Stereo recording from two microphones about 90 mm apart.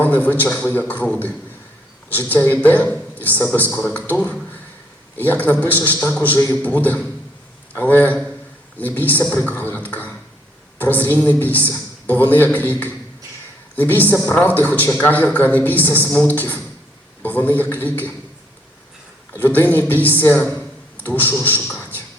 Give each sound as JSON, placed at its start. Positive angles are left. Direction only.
{"t": 0.0, "sound": "a man's voice", "side_deg": 20}
{"t": 5.1, "sound": "a woman's voice", "side_deg": 20}
{"t": 9.3, "sound": "beatboxing", "side_deg": 20}
{"t": 10.8, "sound": "a woman's voice", "side_deg": 20}
{"t": 19.5, "sound": "a woman's voice", "side_deg": 20}